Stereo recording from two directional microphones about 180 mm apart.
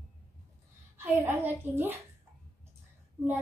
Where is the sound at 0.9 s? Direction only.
10° right (ahead or behind).